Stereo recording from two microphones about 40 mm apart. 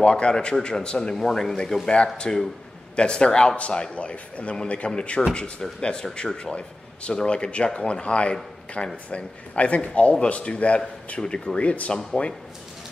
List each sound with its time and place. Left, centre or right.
0.0 s speech: left
1.1 s speech: centre
2.1 s a man's voice: centre
11.6 s a man's voice: left
11.9 s speech: centre